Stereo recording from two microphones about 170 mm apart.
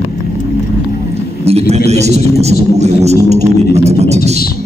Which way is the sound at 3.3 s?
40° right (ahead or behind).